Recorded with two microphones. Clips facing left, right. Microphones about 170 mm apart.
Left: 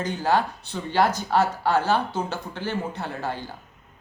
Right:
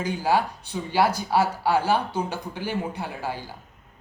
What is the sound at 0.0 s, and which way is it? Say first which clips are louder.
A man's voice: even; 10° right (ahead or behind).